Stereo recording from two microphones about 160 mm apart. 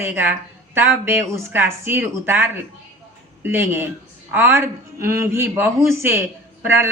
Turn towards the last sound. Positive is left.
turn(degrees=-15)  # may be behind; listen again after turning